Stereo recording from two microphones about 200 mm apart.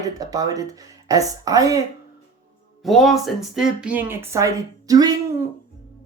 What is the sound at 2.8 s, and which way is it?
A woman's voice, centre (ahead or behind).